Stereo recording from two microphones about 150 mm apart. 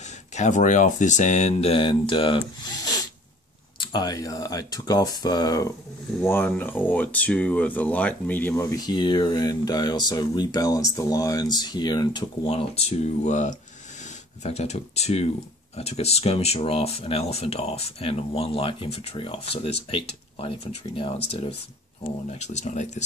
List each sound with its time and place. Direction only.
0.3 s speech: 50° left (ahead or behind); by 2.7 s 35° left (ahead or behind)
2.8 s a sound: 25° left (ahead or behind)
3.9 s speech: 25° left (ahead or behind)
6.2 s speech: 15° left (ahead or behind); by 12.3 s 30° left (ahead or behind)
12.4 s speech: 40° left (ahead or behind)